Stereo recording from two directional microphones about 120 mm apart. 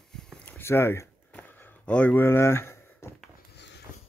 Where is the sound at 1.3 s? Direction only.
15° left (ahead or behind).